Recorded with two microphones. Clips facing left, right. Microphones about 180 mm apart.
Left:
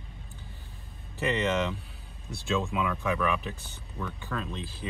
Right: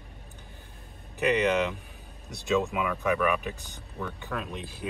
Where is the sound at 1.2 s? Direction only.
15° right (ahead or behind).